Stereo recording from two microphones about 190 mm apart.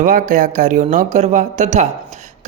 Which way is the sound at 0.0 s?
45° right (ahead or behind).